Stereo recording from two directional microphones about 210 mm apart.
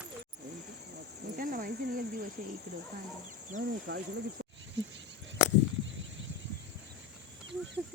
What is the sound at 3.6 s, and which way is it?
Speech, 55° right (ahead or behind).